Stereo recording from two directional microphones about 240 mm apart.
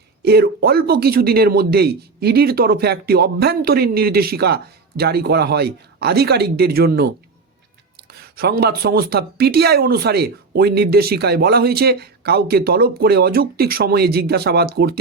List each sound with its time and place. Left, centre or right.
0.2 s speech: right